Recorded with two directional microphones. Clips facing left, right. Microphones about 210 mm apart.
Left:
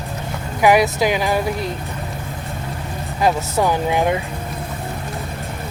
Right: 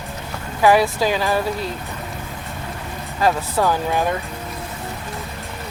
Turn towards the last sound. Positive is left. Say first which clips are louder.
# left 2 dB
turn(degrees=15)  # may be behind; listen again after turning